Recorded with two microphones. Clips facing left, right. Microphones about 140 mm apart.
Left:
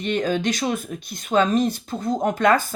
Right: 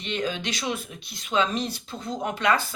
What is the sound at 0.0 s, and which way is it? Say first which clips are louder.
Speech: left 7 dB; 45° left (ahead or behind).